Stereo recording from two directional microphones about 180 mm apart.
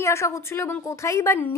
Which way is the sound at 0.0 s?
15° left (ahead or behind).